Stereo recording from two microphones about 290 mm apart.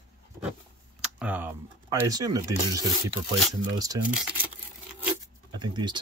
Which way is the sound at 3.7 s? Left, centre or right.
Centre.